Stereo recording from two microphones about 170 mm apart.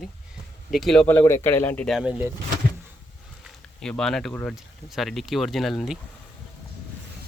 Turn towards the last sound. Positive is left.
turn(degrees=0)  # may be behind; listen again after turning